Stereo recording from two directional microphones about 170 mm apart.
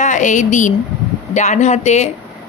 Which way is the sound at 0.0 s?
45° left (ahead or behind).